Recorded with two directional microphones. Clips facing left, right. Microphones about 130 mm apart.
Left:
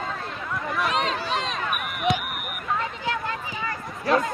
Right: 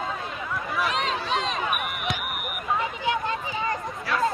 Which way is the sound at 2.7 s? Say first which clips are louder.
Right 2 dB; 20° right (ahead or behind).